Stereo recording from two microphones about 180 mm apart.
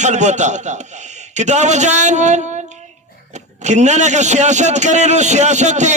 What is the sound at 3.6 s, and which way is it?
A man's voice, 40° right (ahead or behind).